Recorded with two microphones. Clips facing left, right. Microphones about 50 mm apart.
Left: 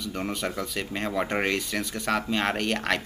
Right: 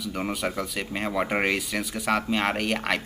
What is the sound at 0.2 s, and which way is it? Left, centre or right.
A man's voice, centre.